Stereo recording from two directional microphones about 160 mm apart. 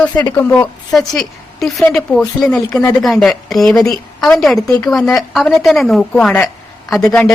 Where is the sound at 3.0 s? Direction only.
Centre (ahead or behind).